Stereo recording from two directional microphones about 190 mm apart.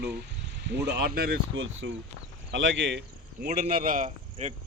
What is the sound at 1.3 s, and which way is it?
Speech, 90° right.